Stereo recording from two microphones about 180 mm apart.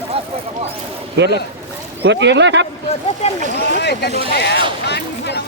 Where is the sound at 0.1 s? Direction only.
35° right (ahead or behind).